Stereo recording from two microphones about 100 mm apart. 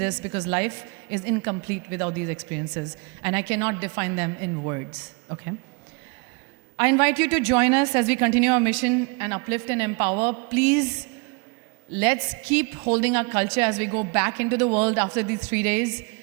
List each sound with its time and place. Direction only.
0.0 s a woman's voice: 25° right (ahead or behind)
6.7 s a woman's voice: 20° right (ahead or behind)